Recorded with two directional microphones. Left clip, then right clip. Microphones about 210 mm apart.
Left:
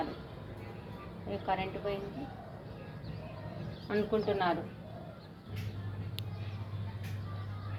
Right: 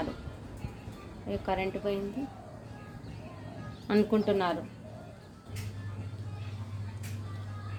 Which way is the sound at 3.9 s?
55° right (ahead or behind).